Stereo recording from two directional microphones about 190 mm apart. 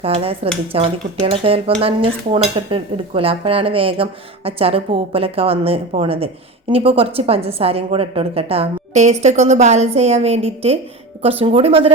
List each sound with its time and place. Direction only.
0.0 s speech: 30° right (ahead or behind)